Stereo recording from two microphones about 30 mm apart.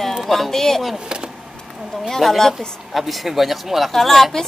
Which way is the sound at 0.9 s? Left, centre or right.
Right.